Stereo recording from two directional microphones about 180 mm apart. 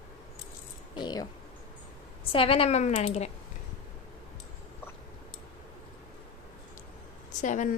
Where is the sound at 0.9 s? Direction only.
20° left (ahead or behind).